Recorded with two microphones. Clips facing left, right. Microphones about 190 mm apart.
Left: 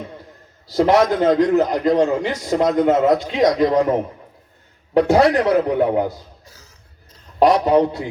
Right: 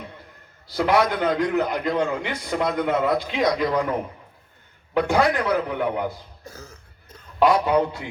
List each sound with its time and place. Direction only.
0.7 s a man's voice: 40° left (ahead or behind)
6.4 s cough: 55° right (ahead or behind)
7.3 s a man's voice: 40° left (ahead or behind)